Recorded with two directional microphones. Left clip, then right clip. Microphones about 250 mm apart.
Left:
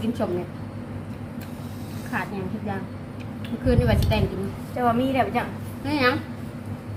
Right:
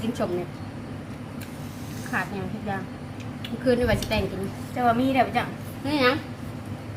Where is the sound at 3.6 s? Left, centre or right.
Centre.